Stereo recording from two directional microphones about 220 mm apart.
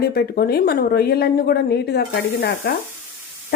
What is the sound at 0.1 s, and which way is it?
Speech, 45° left (ahead or behind).